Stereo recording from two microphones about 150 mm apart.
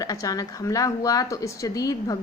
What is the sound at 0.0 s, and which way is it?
A woman's voice, 25° left (ahead or behind).